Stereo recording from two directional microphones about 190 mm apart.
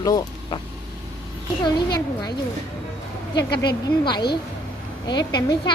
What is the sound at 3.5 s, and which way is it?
Speech, 60° left (ahead or behind).